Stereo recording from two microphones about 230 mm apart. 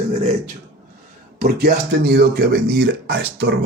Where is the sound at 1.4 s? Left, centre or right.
Right.